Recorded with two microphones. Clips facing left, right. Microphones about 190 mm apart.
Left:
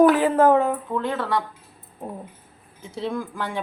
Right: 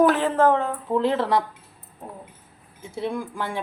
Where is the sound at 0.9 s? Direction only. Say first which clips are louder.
Right 4 dB; 25° right (ahead or behind).